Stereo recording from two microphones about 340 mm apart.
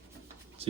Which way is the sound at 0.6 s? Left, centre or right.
Centre.